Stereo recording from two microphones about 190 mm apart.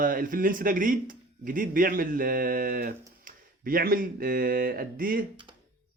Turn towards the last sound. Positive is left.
turn(degrees=-50)  # may be behind; listen again after turning